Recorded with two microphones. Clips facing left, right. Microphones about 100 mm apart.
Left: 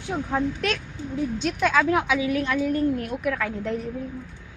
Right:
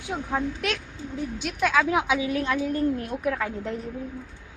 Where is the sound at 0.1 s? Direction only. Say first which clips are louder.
Left 2 dB; 5° right (ahead or behind).